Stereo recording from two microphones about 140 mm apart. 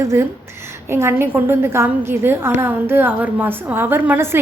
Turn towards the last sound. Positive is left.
turn(degrees=-15)  # may be behind; listen again after turning